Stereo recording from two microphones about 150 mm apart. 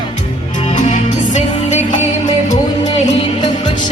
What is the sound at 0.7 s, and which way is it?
Music, 55° left (ahead or behind).